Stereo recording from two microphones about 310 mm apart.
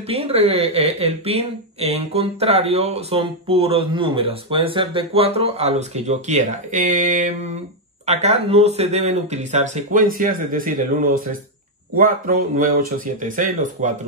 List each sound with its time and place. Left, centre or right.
0.1 s speech: centre